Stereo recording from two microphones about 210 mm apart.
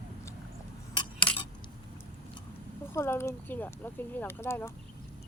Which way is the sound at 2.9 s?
15° left (ahead or behind).